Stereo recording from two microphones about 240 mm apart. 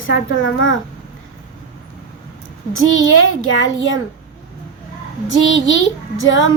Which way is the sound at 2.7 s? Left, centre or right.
Left.